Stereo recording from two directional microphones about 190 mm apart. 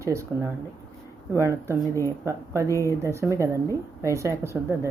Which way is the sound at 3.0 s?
15° right (ahead or behind).